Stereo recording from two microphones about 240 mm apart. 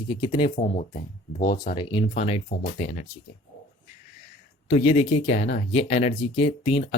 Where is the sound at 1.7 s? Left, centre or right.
Left.